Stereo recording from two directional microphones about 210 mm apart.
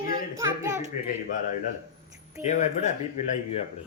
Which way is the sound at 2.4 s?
35° left (ahead or behind).